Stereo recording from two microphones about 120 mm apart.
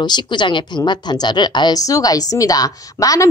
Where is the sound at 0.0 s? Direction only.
40° left (ahead or behind).